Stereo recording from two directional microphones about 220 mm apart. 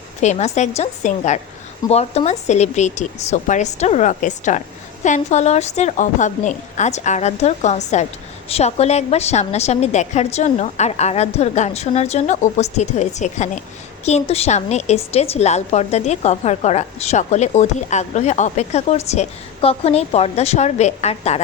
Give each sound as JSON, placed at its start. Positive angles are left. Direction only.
{"t": 0.2, "sound": "a woman's voice", "side_deg": 30}